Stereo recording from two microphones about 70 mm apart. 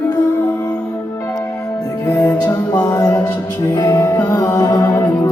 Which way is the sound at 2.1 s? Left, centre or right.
Left.